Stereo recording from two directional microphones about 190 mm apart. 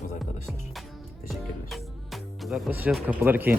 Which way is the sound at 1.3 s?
Centre (ahead or behind).